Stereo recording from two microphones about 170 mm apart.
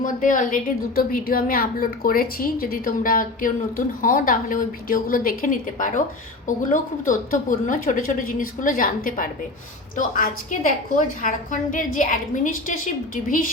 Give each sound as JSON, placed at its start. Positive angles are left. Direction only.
{"t": 0.0, "sound": "a woman's voice", "side_deg": 50}